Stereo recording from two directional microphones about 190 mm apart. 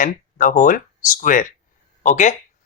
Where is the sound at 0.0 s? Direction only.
45° left (ahead or behind).